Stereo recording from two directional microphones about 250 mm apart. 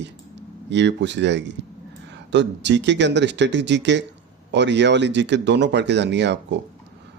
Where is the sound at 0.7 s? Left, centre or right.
Right.